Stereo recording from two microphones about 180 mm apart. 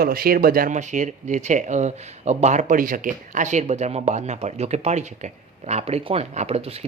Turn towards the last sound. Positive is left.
turn(degrees=-35)  # may be behind; listen again after turning